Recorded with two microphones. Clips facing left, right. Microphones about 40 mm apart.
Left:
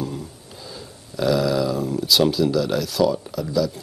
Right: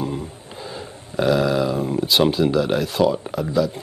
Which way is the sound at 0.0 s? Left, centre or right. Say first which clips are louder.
Right 3 dB; right.